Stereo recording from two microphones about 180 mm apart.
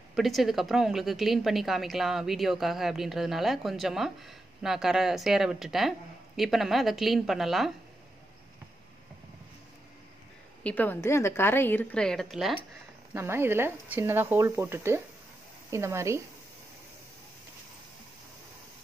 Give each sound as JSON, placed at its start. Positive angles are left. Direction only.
{"t": 0.1, "sound": "a woman's voice", "side_deg": 0}
{"t": 10.6, "sound": "a woman's voice", "side_deg": 10}
{"t": 13.1, "sound": "speech", "side_deg": -15}